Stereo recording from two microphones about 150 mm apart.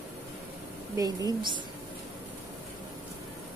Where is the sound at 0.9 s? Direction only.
25° right (ahead or behind).